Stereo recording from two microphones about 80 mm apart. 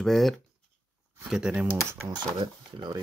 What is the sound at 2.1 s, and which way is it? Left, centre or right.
Speech, right.